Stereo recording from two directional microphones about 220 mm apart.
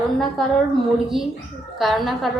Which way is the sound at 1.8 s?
Centre (ahead or behind).